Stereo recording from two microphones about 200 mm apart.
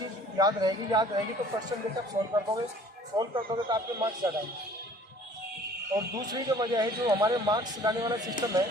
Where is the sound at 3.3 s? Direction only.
20° right (ahead or behind).